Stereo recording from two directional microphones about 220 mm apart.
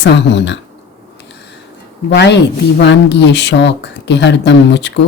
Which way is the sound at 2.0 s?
50° left (ahead or behind).